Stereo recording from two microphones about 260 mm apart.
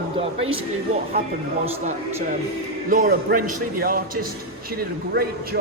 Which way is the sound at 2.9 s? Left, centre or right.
Right.